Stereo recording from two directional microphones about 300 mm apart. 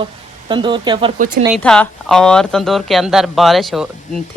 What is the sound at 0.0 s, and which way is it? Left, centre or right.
Speech, centre.